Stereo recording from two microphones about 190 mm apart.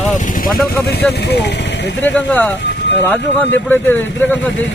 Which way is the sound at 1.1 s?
60° left (ahead or behind).